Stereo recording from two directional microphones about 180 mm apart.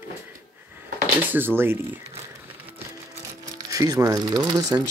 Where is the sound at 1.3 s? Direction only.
10° right (ahead or behind).